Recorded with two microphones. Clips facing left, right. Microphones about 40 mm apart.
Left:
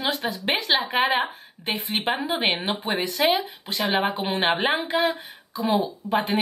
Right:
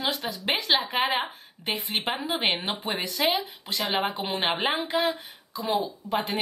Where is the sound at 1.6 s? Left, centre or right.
Left.